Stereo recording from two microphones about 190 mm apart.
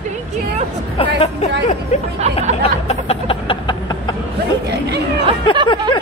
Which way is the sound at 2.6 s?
30° left (ahead or behind).